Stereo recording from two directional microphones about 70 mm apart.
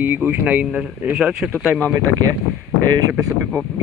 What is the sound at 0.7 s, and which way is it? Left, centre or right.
Speech, centre.